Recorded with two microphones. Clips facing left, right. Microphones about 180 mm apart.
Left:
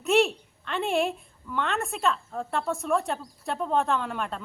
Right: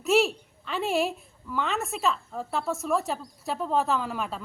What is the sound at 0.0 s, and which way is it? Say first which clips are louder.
A woman's voice: even; centre (ahead or behind).